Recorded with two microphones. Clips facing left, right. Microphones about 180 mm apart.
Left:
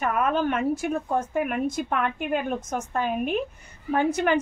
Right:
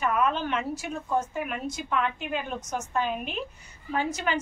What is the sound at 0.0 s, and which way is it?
A woman's voice, 50° left (ahead or behind).